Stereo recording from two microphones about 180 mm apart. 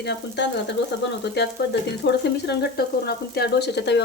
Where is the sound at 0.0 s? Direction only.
70° left (ahead or behind).